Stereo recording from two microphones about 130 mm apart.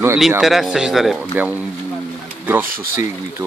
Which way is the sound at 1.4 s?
10° right (ahead or behind).